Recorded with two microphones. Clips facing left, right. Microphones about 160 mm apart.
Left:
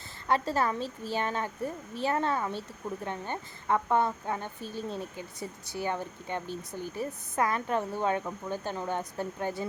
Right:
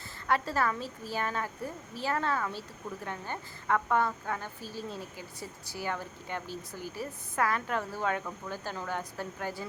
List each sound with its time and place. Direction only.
0.3 s a woman's voice: 25° left (ahead or behind)